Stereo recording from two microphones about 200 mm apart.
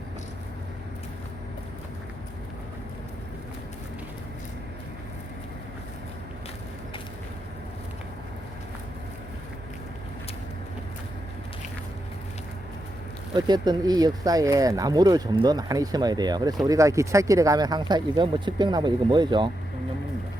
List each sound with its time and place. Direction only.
13.3 s speech: 20° right (ahead or behind)